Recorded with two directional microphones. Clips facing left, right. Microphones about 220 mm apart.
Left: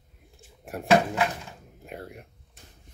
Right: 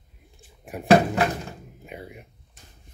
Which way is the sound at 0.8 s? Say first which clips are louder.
Right 4 dB; 40° right (ahead or behind).